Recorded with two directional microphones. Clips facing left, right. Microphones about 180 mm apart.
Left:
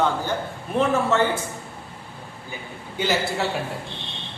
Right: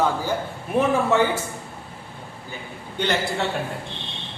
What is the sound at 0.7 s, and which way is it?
Speech, 15° right (ahead or behind).